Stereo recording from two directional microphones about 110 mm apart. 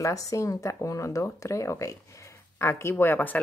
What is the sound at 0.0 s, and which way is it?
A woman's voice, 30° left (ahead or behind).